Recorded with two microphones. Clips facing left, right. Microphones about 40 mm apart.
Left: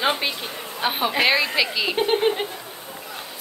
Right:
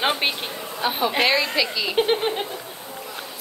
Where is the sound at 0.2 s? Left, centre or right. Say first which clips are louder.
Right 2 dB; right.